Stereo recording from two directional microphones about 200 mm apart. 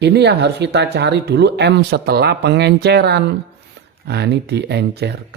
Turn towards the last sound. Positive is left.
turn(degrees=-55)  # may be behind; listen again after turning